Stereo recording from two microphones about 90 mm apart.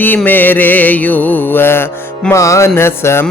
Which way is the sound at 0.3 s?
20° left (ahead or behind).